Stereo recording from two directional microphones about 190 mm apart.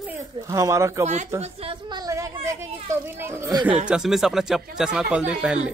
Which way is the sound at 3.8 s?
5° right (ahead or behind).